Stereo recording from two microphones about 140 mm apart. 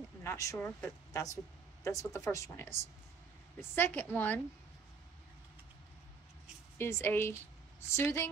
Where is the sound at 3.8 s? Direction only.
15° left (ahead or behind).